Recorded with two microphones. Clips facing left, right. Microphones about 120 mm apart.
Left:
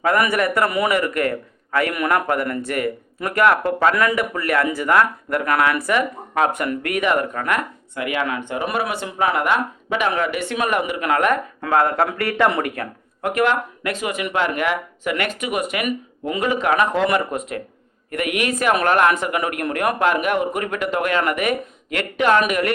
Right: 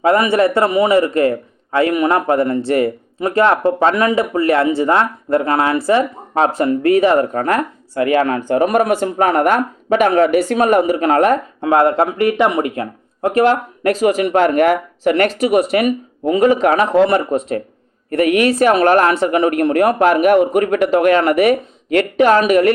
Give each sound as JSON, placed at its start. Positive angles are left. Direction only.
{"t": 0.0, "sound": "a man's voice", "side_deg": -25}